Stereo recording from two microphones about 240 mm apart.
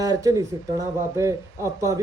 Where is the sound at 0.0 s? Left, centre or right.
Centre.